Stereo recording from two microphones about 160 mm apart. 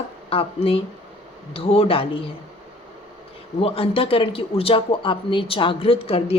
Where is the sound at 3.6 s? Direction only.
35° left (ahead or behind).